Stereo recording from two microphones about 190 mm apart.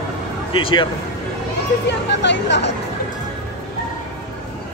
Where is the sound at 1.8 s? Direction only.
65° left (ahead or behind).